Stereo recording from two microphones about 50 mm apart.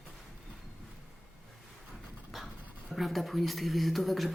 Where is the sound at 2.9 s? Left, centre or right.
Centre.